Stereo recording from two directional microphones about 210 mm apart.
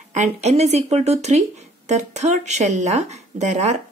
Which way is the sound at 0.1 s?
30° right (ahead or behind).